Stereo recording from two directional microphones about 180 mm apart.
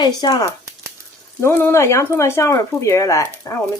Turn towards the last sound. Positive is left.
turn(degrees=15)  # may be behind; listen again after turning